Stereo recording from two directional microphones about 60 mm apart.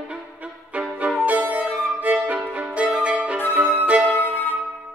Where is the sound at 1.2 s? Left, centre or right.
Right.